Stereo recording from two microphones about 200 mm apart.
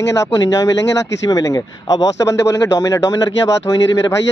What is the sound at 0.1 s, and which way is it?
Speech, 20° left (ahead or behind).